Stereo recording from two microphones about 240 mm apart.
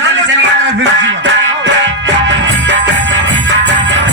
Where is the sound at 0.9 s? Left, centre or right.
Right.